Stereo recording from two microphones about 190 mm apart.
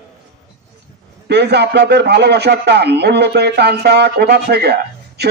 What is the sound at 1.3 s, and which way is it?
A man's voice, 60° right (ahead or behind).